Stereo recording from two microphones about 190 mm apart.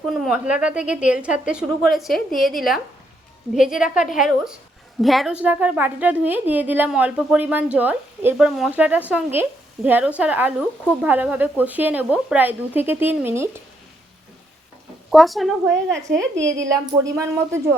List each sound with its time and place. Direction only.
0.0 s a woman's voice: centre (ahead or behind)
15.1 s a woman's voice: centre (ahead or behind)
16.9 s a woman's voice: 15° right (ahead or behind)